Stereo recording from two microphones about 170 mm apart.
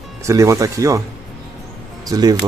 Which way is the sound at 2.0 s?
20° right (ahead or behind).